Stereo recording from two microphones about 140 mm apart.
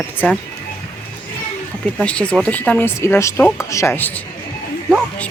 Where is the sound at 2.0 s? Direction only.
10° left (ahead or behind).